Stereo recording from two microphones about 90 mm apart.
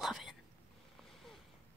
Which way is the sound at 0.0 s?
Centre (ahead or behind).